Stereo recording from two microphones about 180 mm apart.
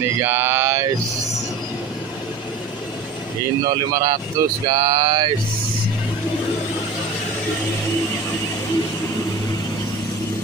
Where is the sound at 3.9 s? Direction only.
20° right (ahead or behind).